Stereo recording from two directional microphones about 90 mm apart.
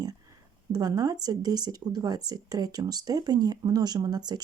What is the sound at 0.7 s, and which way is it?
Speech, 45° right (ahead or behind).